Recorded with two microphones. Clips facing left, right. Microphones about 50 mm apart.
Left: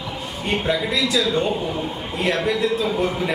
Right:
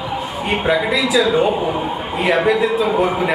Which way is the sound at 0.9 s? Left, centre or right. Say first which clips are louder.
Right 5 dB; centre.